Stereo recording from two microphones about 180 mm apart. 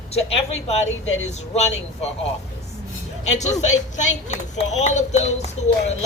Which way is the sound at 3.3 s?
40° left (ahead or behind).